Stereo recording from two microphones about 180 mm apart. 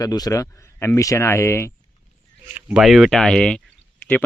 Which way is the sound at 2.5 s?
5° right (ahead or behind).